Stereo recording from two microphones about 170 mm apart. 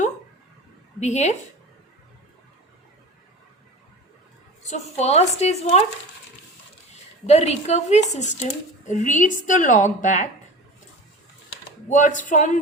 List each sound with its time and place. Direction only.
0.9 s a woman's voice: 40° left (ahead or behind)
4.6 s speech: 40° left (ahead or behind)
7.3 s a woman's voice: 40° left (ahead or behind)
11.9 s a woman's voice: 50° left (ahead or behind)